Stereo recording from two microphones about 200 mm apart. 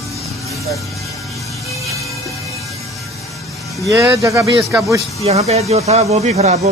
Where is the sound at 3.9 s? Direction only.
15° right (ahead or behind).